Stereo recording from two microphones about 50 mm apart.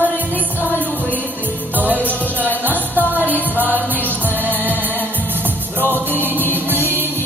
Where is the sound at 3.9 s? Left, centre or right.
Left.